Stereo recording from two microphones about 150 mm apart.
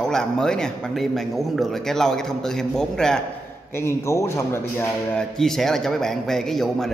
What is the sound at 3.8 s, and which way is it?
Speech, 20° left (ahead or behind).